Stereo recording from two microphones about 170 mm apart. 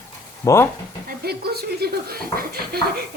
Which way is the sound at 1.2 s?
70° right (ahead or behind).